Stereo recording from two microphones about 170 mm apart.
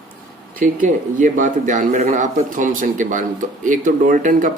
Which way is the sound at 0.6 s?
50° right (ahead or behind).